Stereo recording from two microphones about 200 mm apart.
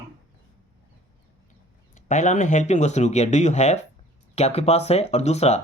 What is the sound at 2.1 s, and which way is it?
Speech, 35° left (ahead or behind).